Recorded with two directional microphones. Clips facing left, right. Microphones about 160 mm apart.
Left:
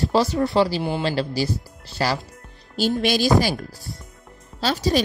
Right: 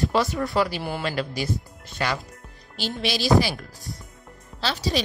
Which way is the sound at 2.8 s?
45° left (ahead or behind).